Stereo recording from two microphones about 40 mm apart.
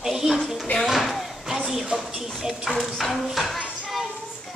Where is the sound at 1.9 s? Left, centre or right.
Centre.